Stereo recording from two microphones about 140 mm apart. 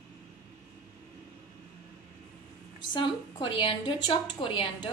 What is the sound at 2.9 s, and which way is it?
A woman's voice, 35° left (ahead or behind).